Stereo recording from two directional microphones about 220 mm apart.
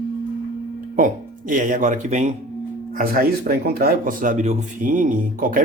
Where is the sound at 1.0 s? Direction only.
35° right (ahead or behind).